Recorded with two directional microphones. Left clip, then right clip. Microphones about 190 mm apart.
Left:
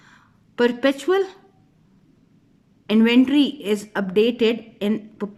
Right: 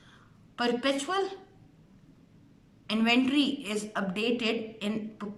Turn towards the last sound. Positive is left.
turn(degrees=45)  # may be behind; listen again after turning